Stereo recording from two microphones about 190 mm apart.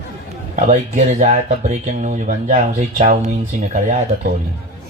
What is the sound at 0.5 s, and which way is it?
Speech, 40° right (ahead or behind).